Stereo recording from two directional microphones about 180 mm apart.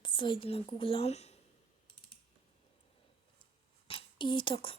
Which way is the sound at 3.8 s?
30° left (ahead or behind).